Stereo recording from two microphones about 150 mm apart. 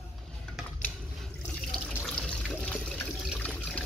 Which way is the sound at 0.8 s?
5° left (ahead or behind).